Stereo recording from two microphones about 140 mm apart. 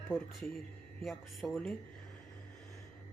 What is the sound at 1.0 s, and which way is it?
Speech, centre (ahead or behind).